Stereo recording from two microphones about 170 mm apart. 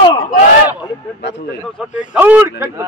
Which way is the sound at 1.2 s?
90° left.